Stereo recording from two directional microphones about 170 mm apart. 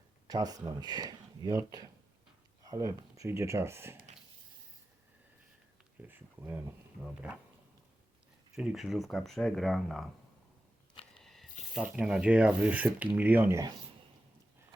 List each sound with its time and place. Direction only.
0.3 s speech: 20° right (ahead or behind)
6.0 s speech: 10° right (ahead or behind)
8.5 s speech: centre (ahead or behind)
11.1 s a sound: centre (ahead or behind)
11.7 s speech: 5° right (ahead or behind)